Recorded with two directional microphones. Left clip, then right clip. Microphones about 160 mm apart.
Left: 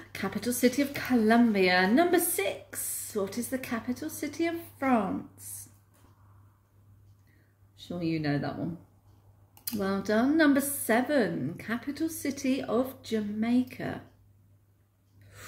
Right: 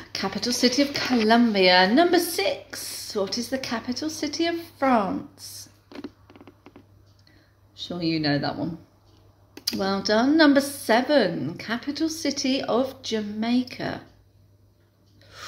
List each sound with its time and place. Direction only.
0.1 s speech: 25° left (ahead or behind)
7.8 s speech: 20° left (ahead or behind)